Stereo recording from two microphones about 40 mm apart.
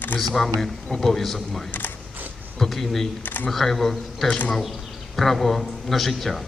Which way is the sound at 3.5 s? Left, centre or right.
Centre.